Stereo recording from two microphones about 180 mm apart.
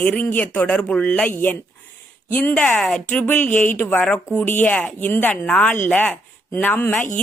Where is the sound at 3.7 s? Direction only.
10° left (ahead or behind).